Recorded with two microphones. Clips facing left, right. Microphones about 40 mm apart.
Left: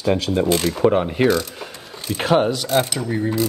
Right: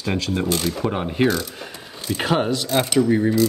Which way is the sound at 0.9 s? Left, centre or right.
Centre.